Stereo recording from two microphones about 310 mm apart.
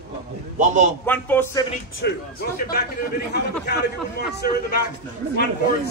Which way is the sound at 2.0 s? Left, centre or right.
Left.